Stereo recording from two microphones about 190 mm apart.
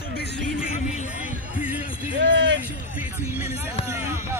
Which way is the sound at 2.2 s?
70° right (ahead or behind).